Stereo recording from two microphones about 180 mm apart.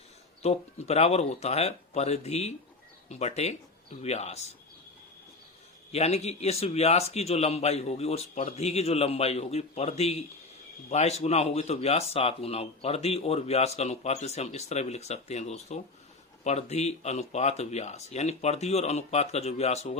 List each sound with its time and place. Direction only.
0.4 s speech: 35° left (ahead or behind)
5.9 s speech: 35° left (ahead or behind)